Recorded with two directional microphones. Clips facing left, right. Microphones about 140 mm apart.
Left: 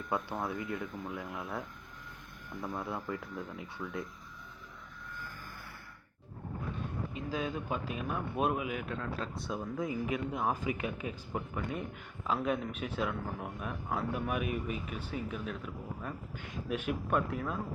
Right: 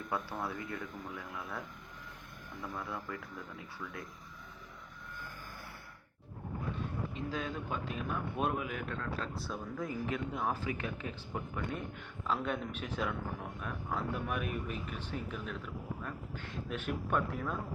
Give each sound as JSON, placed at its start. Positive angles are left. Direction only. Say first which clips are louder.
{"t": 0.1, "sound": "speech", "louder": "left 3 dB", "side_deg": 20}
{"t": 7.1, "sound": "speech", "louder": "left 2 dB", "side_deg": 10}